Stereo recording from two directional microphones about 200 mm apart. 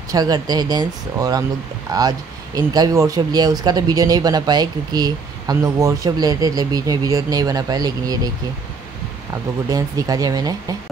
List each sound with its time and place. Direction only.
0.1 s speech: 20° right (ahead or behind)
9.3 s speech: 15° right (ahead or behind)